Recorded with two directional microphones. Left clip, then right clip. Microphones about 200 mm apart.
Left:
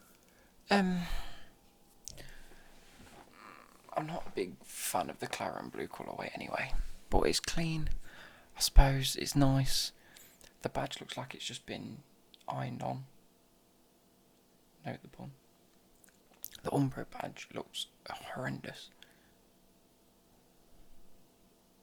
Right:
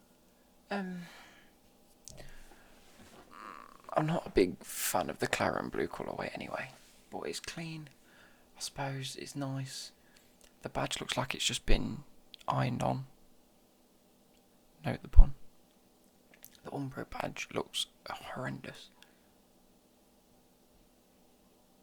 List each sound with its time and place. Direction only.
0.7 s gasp: 25° left (ahead or behind)
2.0 s whispering: centre (ahead or behind)
3.3 s speech: 20° right (ahead or behind)
7.1 s speech: 20° left (ahead or behind)
10.4 s a sound: 10° left (ahead or behind)
10.8 s speech: 10° right (ahead or behind)
14.8 s speech: 15° right (ahead or behind)
16.4 s a sound: 20° left (ahead or behind)
16.9 s speech: 5° right (ahead or behind)
18.1 s speech: centre (ahead or behind)